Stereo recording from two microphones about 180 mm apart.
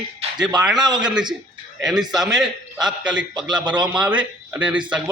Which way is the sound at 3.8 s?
5° right (ahead or behind).